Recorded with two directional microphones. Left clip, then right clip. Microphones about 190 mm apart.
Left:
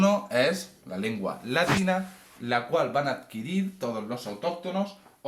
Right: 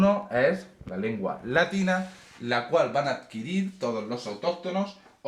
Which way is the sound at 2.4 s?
10° right (ahead or behind).